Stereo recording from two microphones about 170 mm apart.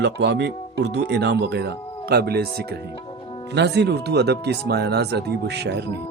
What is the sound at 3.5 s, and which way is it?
Speech, 85° right.